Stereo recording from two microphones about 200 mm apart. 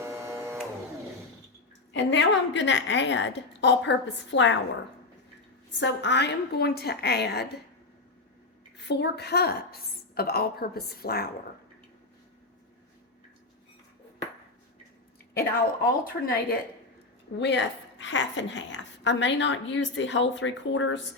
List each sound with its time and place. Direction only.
0.0 s printer: 15° right (ahead or behind)
1.9 s a woman's voice: 65° left (ahead or behind)
5.8 s a woman's voice: 60° left (ahead or behind)
8.8 s a woman's voice: 55° left (ahead or behind)
15.8 s a woman's voice: 50° left (ahead or behind)
17.3 s a woman's voice: 60° left (ahead or behind)